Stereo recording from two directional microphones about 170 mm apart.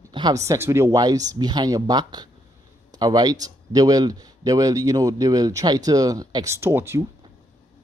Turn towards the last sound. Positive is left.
turn(degrees=-15)  # may be behind; listen again after turning